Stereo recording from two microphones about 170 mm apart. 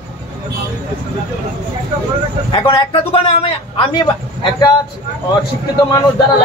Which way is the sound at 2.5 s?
25° left (ahead or behind).